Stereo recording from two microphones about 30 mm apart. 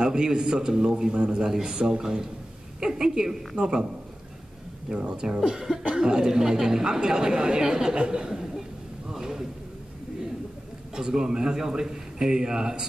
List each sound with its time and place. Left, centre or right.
0.0 s speech: right
1.4 s a man's voice: centre
4.9 s speech: right
9.1 s a sound: centre
11.0 s speech: right